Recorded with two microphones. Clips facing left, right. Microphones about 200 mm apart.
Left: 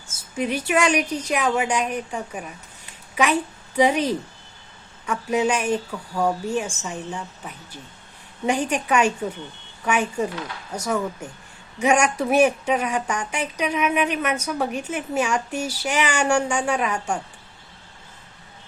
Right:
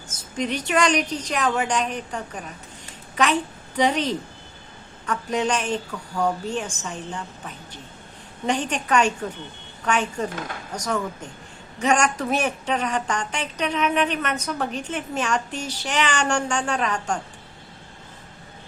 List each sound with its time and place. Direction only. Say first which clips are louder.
0.1 s a woman's voice: left 1 dB; 10° left (ahead or behind)
10.3 s speech: even; 45° right (ahead or behind)
10.8 s a woman's voice: left 2 dB; 10° left (ahead or behind)